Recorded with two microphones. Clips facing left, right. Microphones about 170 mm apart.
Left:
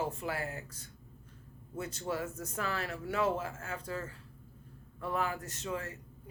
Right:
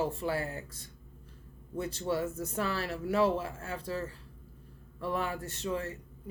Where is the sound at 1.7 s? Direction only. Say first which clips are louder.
Right 4 dB; 30° right (ahead or behind).